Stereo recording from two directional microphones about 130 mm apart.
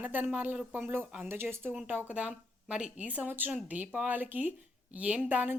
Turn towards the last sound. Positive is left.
turn(degrees=-10)  # may be behind; listen again after turning